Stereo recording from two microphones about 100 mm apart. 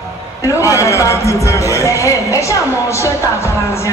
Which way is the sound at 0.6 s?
30° left (ahead or behind).